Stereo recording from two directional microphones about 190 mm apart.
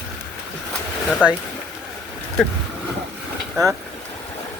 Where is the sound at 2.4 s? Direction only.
Centre (ahead or behind).